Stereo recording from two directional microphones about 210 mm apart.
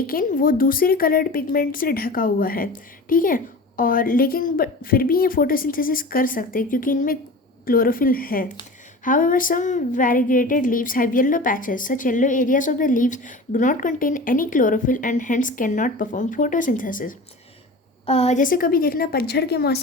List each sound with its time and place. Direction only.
0.1 s a woman's voice: 40° left (ahead or behind)
9.0 s a sound: 40° left (ahead or behind)
18.0 s a woman's voice: 30° left (ahead or behind); by 19.8 s 50° left (ahead or behind)